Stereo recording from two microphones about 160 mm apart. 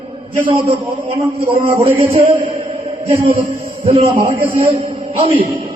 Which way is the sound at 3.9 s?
50° right (ahead or behind).